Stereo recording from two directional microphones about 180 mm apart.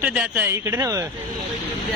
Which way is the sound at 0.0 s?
5° right (ahead or behind).